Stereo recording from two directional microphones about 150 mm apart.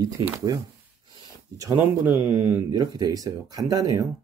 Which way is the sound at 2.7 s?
25° right (ahead or behind).